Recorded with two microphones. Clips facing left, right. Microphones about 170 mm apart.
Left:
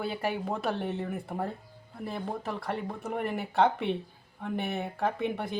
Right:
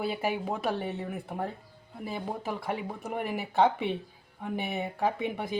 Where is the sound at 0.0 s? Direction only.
5° right (ahead or behind).